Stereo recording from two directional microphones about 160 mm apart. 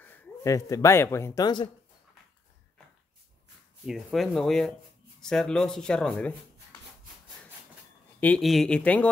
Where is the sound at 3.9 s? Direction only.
Centre (ahead or behind).